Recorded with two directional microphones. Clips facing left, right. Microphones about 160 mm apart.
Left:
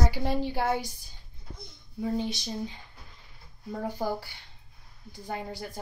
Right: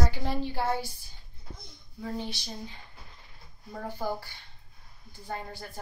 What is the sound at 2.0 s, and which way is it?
Speech, 15° left (ahead or behind).